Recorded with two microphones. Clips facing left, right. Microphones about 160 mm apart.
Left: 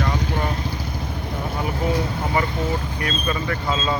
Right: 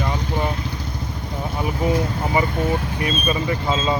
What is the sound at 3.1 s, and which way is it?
Speech, 15° right (ahead or behind).